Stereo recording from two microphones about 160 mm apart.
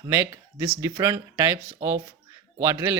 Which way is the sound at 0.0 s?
15° right (ahead or behind).